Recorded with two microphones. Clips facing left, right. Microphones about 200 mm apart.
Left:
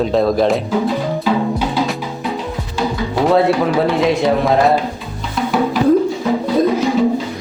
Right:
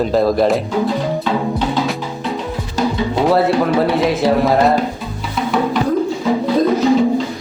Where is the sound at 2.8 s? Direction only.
40° right (ahead or behind).